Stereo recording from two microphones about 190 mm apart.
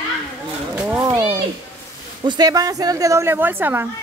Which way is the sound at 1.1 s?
20° right (ahead or behind).